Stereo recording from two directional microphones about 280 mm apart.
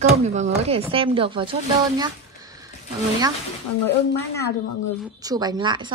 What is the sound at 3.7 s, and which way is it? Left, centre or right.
Speech, left.